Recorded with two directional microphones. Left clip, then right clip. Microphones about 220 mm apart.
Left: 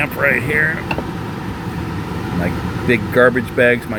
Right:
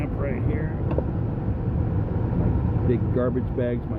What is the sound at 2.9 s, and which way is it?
Speech, 5° left (ahead or behind).